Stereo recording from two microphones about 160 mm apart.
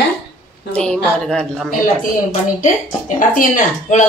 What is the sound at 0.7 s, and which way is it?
Speech, 5° left (ahead or behind).